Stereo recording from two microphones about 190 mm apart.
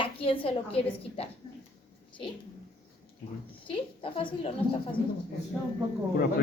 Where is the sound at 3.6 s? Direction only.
30° left (ahead or behind).